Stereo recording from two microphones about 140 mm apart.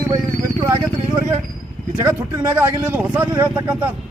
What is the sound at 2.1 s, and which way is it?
A man's voice, 20° right (ahead or behind).